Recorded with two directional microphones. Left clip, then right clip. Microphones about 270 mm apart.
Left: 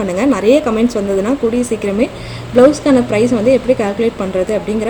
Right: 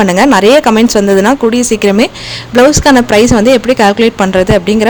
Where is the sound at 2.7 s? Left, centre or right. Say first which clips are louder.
Right 7 dB; right.